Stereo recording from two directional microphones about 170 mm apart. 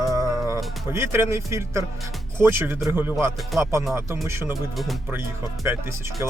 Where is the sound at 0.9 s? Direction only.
15° right (ahead or behind).